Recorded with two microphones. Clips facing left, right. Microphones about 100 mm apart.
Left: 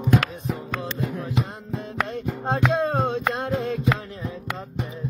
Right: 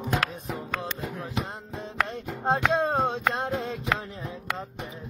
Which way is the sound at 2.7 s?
25° right (ahead or behind).